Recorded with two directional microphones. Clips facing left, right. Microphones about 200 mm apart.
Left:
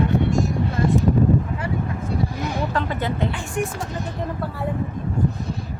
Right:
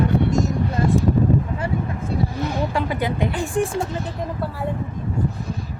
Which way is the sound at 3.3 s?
30° right (ahead or behind).